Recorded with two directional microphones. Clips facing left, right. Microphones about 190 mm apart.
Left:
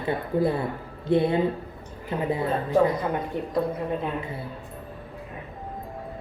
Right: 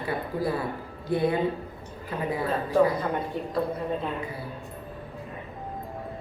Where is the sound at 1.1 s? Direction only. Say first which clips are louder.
Left 3 dB; 25° left (ahead or behind).